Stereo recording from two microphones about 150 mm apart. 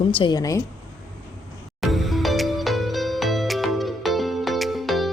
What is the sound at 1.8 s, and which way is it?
Music, centre (ahead or behind).